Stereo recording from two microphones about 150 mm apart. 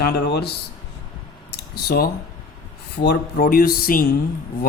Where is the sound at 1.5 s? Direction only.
85° left.